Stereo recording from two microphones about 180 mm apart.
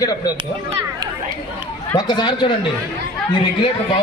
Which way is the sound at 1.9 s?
25° left (ahead or behind).